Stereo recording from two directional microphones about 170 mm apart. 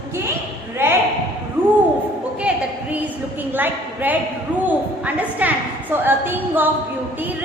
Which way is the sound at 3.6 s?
10° right (ahead or behind).